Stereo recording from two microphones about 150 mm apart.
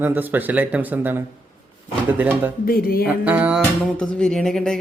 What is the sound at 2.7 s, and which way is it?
Music, 80° left.